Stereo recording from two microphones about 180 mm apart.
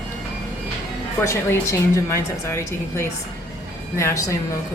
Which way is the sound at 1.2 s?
15° left (ahead or behind).